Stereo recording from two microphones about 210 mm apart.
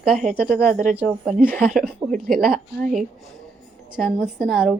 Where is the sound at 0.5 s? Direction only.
45° right (ahead or behind).